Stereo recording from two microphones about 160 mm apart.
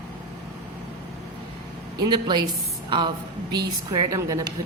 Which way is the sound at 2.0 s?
25° right (ahead or behind).